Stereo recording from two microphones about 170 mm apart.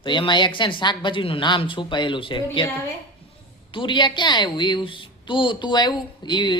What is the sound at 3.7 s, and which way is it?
A woman's voice, 30° left (ahead or behind).